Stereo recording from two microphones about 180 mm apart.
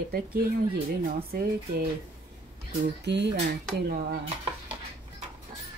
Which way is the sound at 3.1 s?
75° right (ahead or behind).